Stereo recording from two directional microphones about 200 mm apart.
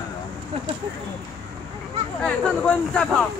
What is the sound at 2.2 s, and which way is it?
Speech, 5° left (ahead or behind).